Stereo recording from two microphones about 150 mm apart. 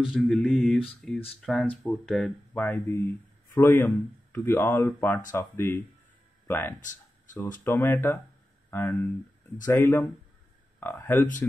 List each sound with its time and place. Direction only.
0.0 s mantra: centre (ahead or behind)
2.0 s speech: 5° left (ahead or behind)
6.8 s a sound: 60° left (ahead or behind)
7.6 s speech: 15° left (ahead or behind)